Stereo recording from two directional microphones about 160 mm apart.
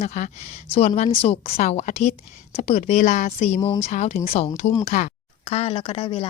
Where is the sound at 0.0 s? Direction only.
45° left (ahead or behind).